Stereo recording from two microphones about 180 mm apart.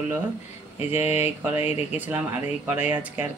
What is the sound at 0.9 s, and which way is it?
Speech, 10° right (ahead or behind).